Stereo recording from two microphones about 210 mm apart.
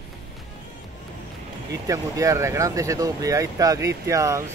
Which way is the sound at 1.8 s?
15° right (ahead or behind).